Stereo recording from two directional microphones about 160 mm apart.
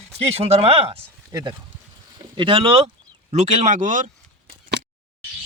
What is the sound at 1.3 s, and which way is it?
Speech, 25° right (ahead or behind).